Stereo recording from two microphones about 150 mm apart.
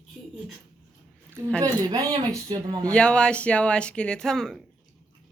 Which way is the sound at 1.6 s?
25° right (ahead or behind).